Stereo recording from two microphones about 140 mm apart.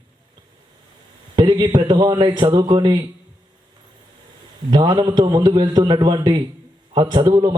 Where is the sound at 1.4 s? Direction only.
30° right (ahead or behind).